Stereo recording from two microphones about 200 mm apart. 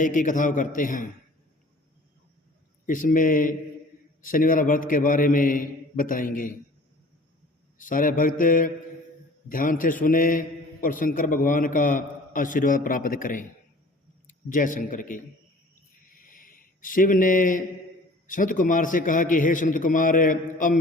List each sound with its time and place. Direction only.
0.0 s a man's voice: 40° left (ahead or behind)
2.8 s a man's voice: 40° left (ahead or behind)
7.8 s a man's voice: 45° left (ahead or behind)
16.1 s a sound: 45° left (ahead or behind)
18.3 s a man's voice: 40° left (ahead or behind)